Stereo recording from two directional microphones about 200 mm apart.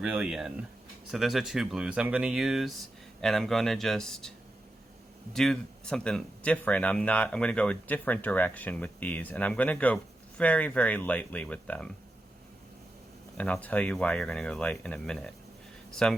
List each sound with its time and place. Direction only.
0.0 s speech: 5° right (ahead or behind)
5.3 s speech: centre (ahead or behind)
13.3 s speech: 5° left (ahead or behind)